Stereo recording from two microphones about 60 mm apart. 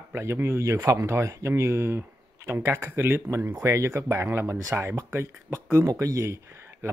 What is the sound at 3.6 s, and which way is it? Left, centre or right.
Speech, right.